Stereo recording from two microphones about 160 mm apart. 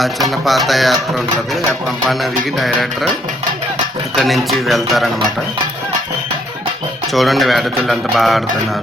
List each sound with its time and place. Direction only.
0.0 s speech: centre (ahead or behind)
2.6 s speech: centre (ahead or behind)
4.1 s speech: centre (ahead or behind)
7.1 s speech: centre (ahead or behind)